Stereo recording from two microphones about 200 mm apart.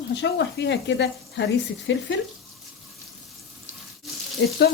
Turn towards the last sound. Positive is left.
turn(degrees=55)  # may be behind; listen again after turning